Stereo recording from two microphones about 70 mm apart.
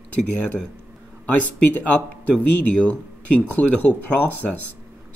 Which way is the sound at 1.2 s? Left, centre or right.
Left.